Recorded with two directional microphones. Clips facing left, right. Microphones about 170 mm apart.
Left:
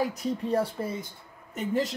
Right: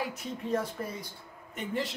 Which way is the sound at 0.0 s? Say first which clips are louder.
Left 7 dB; 40° left (ahead or behind).